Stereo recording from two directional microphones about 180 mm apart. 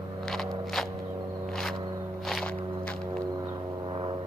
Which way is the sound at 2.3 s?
5° left (ahead or behind).